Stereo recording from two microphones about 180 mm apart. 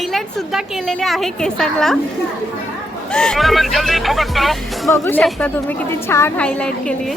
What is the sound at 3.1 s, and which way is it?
A woman's voice, 5° left (ahead or behind).